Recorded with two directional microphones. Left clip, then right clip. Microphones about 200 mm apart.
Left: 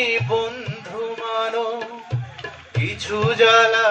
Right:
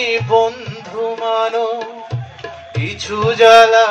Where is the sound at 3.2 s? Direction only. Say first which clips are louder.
Right 7 dB; 30° right (ahead or behind).